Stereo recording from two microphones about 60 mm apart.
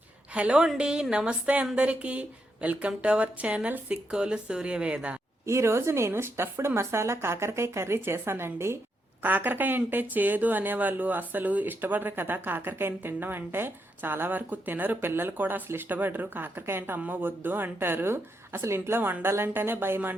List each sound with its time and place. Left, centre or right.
0.3 s speech: centre
5.5 s a woman's voice: right
9.2 s speech: right